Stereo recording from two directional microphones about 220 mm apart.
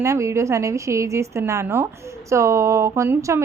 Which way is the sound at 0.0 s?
15° right (ahead or behind).